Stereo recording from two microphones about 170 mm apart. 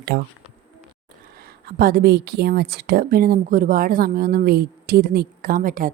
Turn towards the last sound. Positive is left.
turn(degrees=-55)  # may be behind; listen again after turning